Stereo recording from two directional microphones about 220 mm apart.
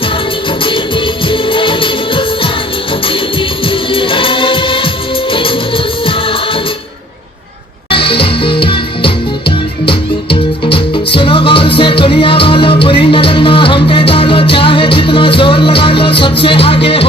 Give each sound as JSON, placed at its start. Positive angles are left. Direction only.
{"t": 0.6, "sound": "music", "side_deg": 20}
{"t": 3.7, "sound": "music", "side_deg": 25}
{"t": 7.9, "sound": "music", "side_deg": 25}
{"t": 10.7, "sound": "music", "side_deg": 25}